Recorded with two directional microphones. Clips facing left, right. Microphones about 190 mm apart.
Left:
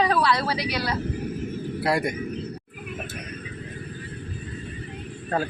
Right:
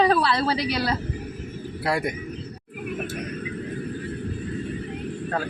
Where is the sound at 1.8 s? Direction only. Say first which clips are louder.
Left 1 dB; centre (ahead or behind).